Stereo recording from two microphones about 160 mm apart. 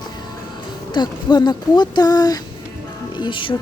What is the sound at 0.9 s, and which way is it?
A woman's voice, 25° left (ahead or behind).